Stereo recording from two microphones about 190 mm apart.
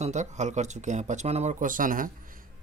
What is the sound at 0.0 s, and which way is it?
Speech, 35° right (ahead or behind).